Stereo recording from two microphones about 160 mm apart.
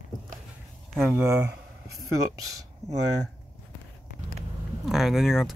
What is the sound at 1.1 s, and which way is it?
Speech, 15° right (ahead or behind).